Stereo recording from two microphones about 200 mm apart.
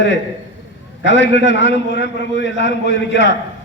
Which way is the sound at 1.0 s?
65° left (ahead or behind).